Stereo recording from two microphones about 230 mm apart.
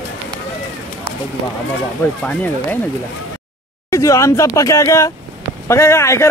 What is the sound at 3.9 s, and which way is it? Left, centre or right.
Speech, centre.